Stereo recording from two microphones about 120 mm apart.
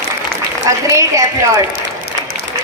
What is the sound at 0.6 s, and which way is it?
Speech, 25° right (ahead or behind).